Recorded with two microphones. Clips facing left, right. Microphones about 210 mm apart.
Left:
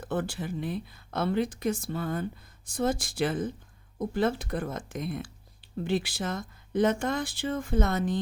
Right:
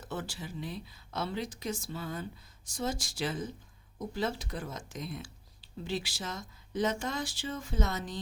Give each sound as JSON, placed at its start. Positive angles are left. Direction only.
{"t": 0.0, "sound": "speech", "side_deg": 55}